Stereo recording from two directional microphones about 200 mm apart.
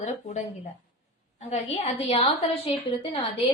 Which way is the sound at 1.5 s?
30° left (ahead or behind).